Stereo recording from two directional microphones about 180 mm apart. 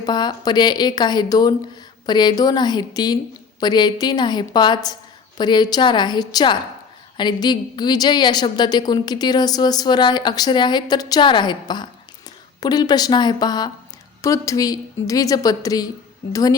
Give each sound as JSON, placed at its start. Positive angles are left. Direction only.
{"t": 0.0, "sound": "a woman's voice", "side_deg": 25}